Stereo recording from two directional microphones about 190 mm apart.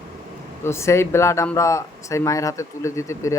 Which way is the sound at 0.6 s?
15° left (ahead or behind).